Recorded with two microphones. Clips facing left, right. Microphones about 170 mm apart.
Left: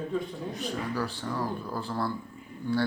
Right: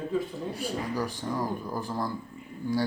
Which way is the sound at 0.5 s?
10° right (ahead or behind).